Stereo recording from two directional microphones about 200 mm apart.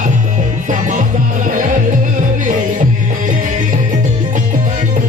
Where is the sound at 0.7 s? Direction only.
40° right (ahead or behind).